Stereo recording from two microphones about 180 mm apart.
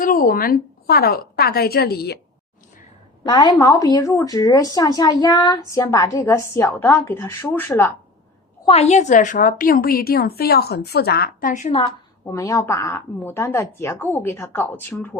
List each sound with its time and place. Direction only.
0.0 s a woman's voice: 50° left (ahead or behind)
3.2 s a woman's voice: 25° left (ahead or behind)
8.6 s a woman's voice: 35° left (ahead or behind)
12.2 s speech: 15° left (ahead or behind)